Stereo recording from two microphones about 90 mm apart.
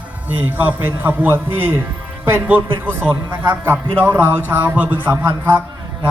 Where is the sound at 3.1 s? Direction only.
60° right (ahead or behind).